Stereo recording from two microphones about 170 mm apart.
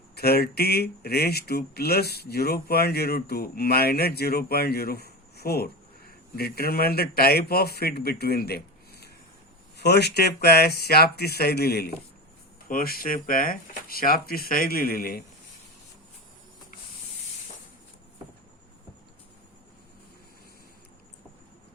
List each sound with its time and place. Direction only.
0.2 s speech: 65° left (ahead or behind)